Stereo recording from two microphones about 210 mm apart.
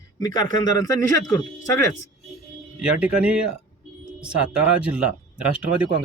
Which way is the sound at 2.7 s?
5° right (ahead or behind).